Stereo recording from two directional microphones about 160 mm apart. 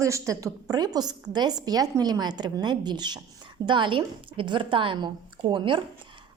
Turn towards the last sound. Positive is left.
turn(degrees=-30)  # may be behind; listen again after turning